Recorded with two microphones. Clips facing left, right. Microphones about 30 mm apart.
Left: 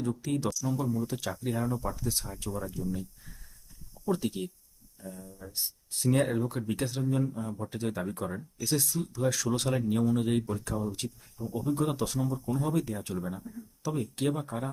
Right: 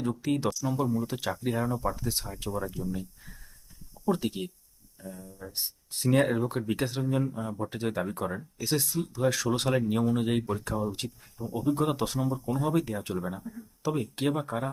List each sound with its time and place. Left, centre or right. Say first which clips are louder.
0.0 s speech: right 2 dB; right; by 5.3 s centre
5.4 s speech: right 2 dB; centre
12.3 s speech: right 2 dB; centre